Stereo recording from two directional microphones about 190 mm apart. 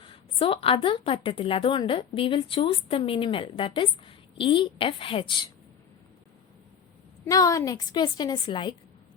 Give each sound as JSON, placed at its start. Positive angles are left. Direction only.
{"t": 0.0, "sound": "a woman's voice", "side_deg": 30}
{"t": 7.3, "sound": "a woman's voice", "side_deg": 15}